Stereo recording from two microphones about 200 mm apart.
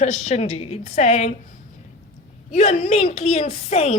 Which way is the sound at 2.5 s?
35° left (ahead or behind).